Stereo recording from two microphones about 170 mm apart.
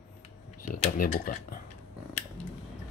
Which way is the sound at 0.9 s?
55° left (ahead or behind).